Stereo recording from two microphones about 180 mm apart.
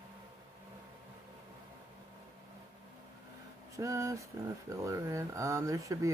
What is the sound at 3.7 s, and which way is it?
Speech, 20° right (ahead or behind).